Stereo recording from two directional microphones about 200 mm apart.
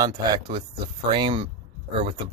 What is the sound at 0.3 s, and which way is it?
Speech, 25° right (ahead or behind).